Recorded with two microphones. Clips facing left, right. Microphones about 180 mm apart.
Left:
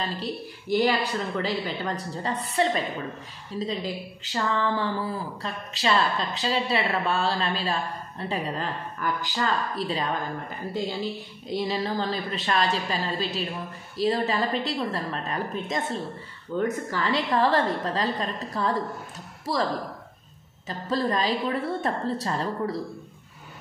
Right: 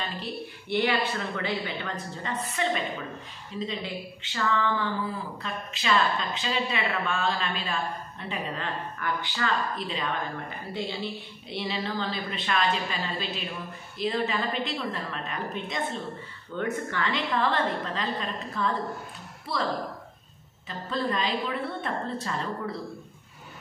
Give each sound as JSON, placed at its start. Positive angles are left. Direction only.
{"t": 0.0, "sound": "a woman's voice", "side_deg": 40}